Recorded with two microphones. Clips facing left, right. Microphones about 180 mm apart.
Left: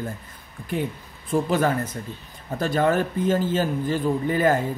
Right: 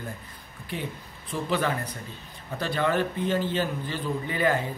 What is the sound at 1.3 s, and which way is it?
A man's voice, 45° left (ahead or behind).